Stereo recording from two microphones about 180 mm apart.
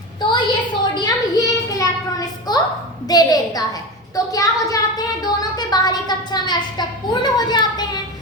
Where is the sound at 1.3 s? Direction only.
20° left (ahead or behind).